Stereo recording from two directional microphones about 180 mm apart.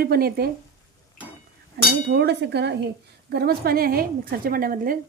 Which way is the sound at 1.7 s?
70° right (ahead or behind).